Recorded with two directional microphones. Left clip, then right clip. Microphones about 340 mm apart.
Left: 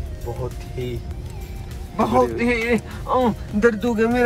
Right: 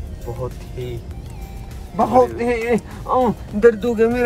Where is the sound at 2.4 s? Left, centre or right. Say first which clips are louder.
Right 1 dB; right.